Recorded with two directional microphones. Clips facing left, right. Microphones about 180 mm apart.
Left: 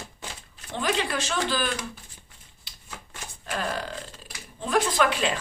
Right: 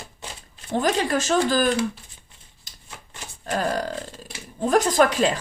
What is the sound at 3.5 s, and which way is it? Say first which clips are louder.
Burping: right 6 dB; 40° right (ahead or behind).